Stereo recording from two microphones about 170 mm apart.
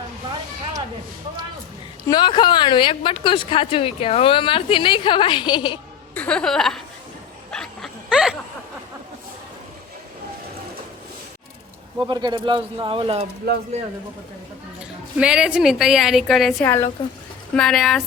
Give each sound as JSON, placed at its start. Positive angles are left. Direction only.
{"t": 2.0, "sound": "a woman's voice", "side_deg": 25}
{"t": 6.1, "sound": "a woman's voice", "side_deg": 5}
{"t": 7.5, "sound": "dog", "side_deg": 5}
{"t": 11.9, "sound": "speech", "side_deg": -25}
{"t": 13.4, "sound": "speech", "side_deg": -65}
{"t": 15.2, "sound": "a woman's voice", "side_deg": -5}
{"t": 16.6, "sound": "speech", "side_deg": 15}
{"t": 17.5, "sound": "a woman's voice", "side_deg": 0}